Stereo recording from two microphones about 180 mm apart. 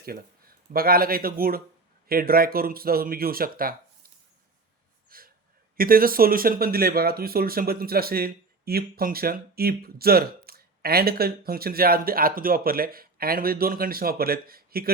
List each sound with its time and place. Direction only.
0.0 s speech: 55° right (ahead or behind)
5.0 s gasp: 55° right (ahead or behind)
5.7 s speech: 55° right (ahead or behind)